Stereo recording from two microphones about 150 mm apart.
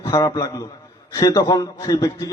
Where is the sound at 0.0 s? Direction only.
25° left (ahead or behind).